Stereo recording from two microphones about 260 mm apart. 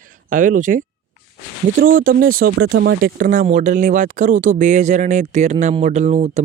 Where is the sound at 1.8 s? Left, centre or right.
Right.